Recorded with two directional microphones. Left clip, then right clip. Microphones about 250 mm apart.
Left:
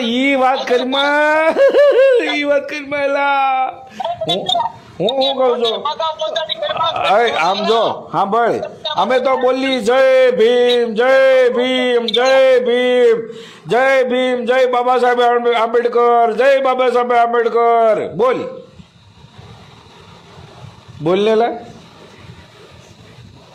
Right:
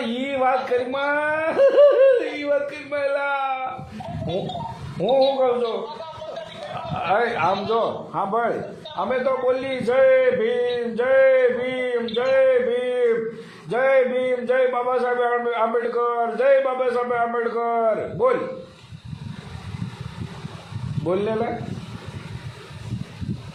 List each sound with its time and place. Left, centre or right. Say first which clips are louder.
0.1 s a sound: left 7 dB; left
5.0 s a man's voice: left 4 dB; left
21.1 s a man's voice: left 10 dB; left